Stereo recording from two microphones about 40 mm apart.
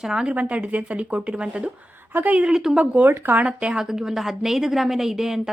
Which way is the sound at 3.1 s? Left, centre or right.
Right.